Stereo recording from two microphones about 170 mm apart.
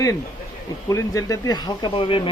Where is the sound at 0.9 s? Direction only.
20° left (ahead or behind).